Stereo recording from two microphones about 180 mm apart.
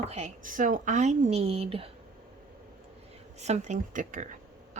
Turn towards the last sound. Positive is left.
turn(degrees=-45)  # may be behind; listen again after turning